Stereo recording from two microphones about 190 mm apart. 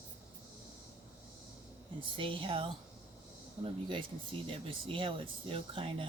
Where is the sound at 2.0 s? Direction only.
25° right (ahead or behind).